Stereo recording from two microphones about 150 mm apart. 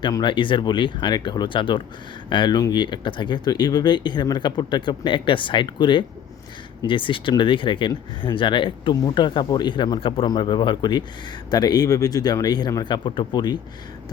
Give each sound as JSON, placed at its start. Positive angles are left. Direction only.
{"t": 0.0, "sound": "speech", "side_deg": 30}